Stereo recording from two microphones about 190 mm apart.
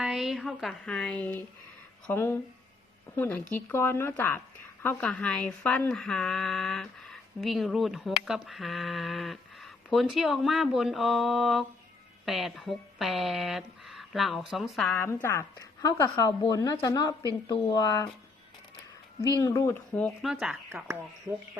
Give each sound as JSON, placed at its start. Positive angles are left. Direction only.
{"t": 0.0, "sound": "speech", "side_deg": -5}
{"t": 19.4, "sound": "speech", "side_deg": 15}
{"t": 20.2, "sound": "speech", "side_deg": -5}